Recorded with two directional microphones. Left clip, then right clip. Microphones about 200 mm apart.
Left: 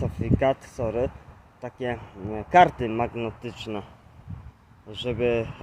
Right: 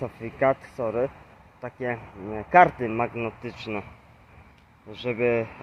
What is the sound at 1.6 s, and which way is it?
Speech, 25° left (ahead or behind).